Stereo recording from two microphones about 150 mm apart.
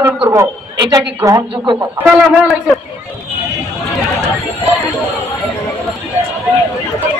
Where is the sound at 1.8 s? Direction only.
15° right (ahead or behind).